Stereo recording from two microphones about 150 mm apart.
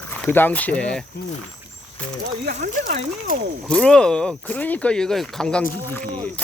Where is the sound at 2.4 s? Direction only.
85° right.